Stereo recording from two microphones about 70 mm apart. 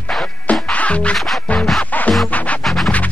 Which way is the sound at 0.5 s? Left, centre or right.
Centre.